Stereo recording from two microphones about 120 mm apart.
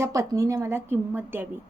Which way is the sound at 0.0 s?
30° right (ahead or behind).